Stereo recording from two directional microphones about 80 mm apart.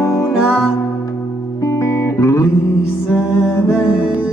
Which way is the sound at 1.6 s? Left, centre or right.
Left.